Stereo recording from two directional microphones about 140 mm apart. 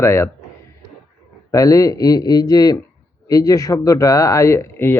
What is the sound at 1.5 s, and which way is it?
Speech, 25° left (ahead or behind).